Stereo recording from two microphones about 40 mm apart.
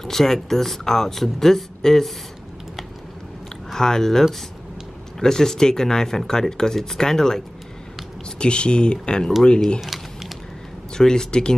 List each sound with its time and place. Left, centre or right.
0.0 s speech: centre
3.7 s speech: centre
8.4 s speech: left
11.0 s speech: centre